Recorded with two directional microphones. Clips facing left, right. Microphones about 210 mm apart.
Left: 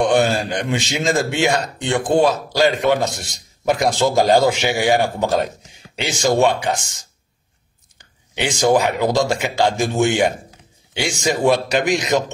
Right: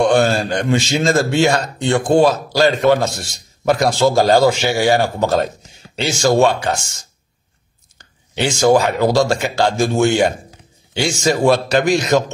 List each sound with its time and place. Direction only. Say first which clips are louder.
0.0 s a man's voice: right 2 dB; 20° left (ahead or behind)
8.5 s a man's voice: right 3 dB; 20° left (ahead or behind)
10.9 s a sound: right 4 dB; 15° left (ahead or behind)
11.4 s a man's voice: right 2 dB; 15° left (ahead or behind)